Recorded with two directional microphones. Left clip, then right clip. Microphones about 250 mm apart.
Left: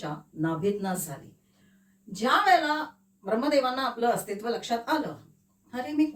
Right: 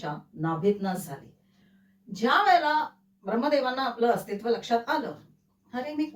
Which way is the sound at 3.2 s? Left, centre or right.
Centre.